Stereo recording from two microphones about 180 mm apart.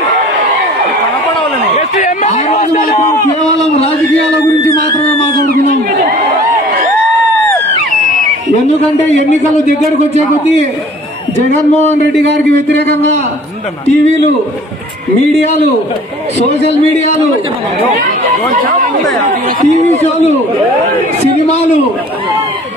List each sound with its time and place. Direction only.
1.8 s a sound: 45° left (ahead or behind)
12.2 s speech: 75° right (ahead or behind)
19.2 s speech: 40° right (ahead or behind)